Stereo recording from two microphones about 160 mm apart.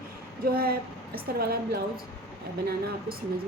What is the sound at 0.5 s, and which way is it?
A woman's voice, 70° right (ahead or behind).